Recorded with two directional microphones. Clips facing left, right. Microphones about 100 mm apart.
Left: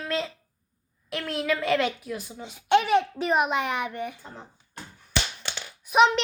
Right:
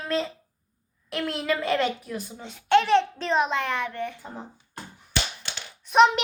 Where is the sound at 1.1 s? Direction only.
Centre (ahead or behind).